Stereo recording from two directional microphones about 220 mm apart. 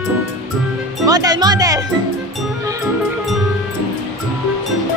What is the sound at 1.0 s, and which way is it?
Music, 15° right (ahead or behind).